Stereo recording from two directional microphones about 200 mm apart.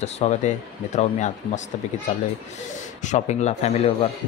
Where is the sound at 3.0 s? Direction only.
35° left (ahead or behind).